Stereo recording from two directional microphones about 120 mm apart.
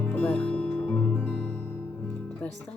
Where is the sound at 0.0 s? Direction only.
10° left (ahead or behind).